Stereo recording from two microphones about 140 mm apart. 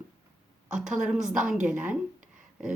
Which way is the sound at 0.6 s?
5° right (ahead or behind).